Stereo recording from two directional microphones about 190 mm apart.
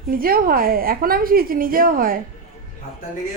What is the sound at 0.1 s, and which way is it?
A woman's voice, 50° right (ahead or behind).